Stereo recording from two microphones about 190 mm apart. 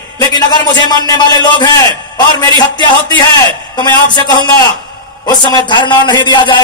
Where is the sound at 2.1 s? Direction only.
25° left (ahead or behind).